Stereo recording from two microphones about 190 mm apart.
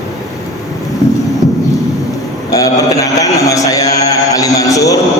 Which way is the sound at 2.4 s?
15° left (ahead or behind).